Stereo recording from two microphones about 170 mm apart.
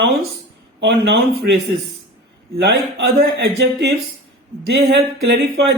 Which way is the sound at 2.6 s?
85° right.